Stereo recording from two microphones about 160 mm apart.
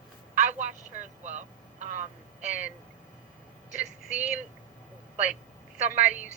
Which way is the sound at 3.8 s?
5° right (ahead or behind).